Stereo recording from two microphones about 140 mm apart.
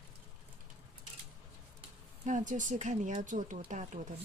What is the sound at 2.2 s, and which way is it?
Speech, 65° right (ahead or behind).